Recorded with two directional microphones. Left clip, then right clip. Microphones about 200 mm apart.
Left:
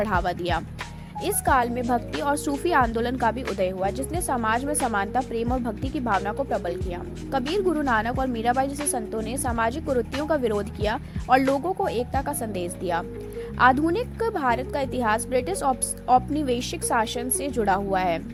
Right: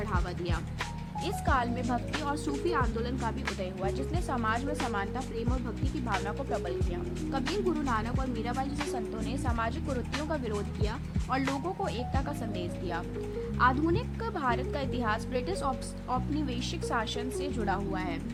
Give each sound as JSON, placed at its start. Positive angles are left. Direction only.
{"t": 0.0, "sound": "speech", "side_deg": 35}